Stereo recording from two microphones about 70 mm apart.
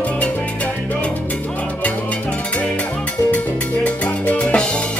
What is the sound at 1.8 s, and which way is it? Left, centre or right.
Music, left.